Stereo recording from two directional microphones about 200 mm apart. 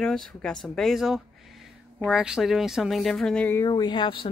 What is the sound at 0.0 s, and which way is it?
Speech, centre (ahead or behind).